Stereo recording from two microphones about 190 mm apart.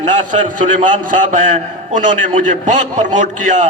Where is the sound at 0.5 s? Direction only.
45° right (ahead or behind).